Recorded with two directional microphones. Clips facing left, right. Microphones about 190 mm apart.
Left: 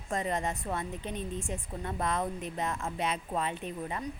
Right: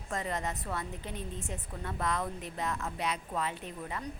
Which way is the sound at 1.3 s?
20° right (ahead or behind).